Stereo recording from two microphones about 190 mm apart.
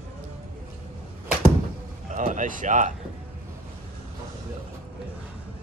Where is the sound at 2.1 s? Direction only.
40° right (ahead or behind).